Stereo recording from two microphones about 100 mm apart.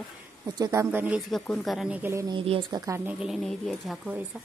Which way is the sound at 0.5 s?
35° right (ahead or behind).